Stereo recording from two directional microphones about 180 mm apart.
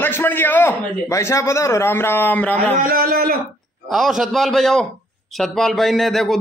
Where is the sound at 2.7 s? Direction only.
50° right (ahead or behind).